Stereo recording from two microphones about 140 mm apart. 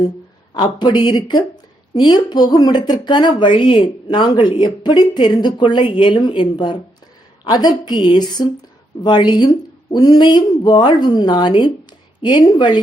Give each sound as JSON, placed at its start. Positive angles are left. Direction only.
{"t": 0.5, "sound": "speech", "side_deg": 30}